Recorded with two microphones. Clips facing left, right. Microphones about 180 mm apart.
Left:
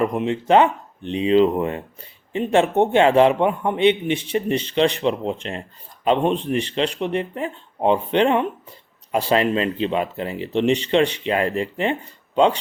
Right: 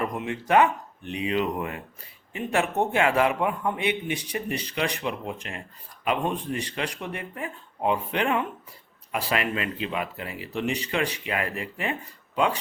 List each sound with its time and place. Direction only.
0.0 s speech: 25° left (ahead or behind)